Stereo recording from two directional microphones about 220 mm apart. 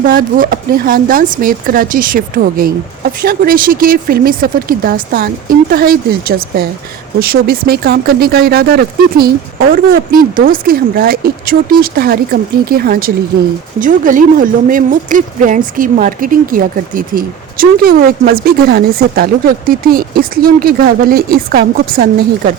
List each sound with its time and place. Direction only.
0.1 s speech: 40° right (ahead or behind)